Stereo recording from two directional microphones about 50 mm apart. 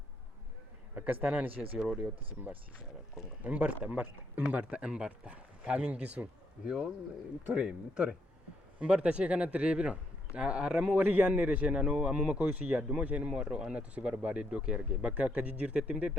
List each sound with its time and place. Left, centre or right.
1.2 s speech: right
2.0 s a man's voice: right
7.4 s a man's voice: right
11.7 s speech: centre
15.4 s a man's voice: right